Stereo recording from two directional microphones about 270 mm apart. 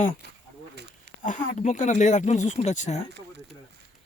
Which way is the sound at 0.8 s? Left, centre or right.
Right.